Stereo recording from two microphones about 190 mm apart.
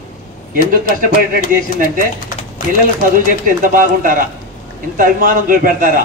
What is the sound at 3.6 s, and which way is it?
A man's voice, 45° right (ahead or behind).